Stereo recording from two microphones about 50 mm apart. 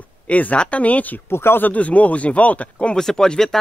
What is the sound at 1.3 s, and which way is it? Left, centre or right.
Speech, left.